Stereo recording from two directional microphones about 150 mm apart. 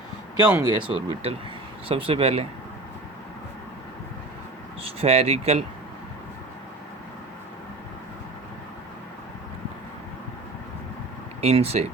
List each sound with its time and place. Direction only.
0.6 s speech: 35° right (ahead or behind)
4.8 s speech: 40° right (ahead or behind)
11.4 s speech: 45° right (ahead or behind)